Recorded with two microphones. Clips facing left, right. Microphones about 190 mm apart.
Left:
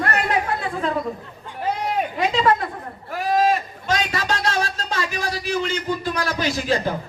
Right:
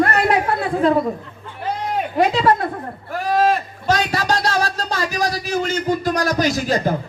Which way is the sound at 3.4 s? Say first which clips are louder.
Right 3 dB; 40° right (ahead or behind).